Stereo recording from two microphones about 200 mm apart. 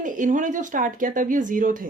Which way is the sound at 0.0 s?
40° right (ahead or behind).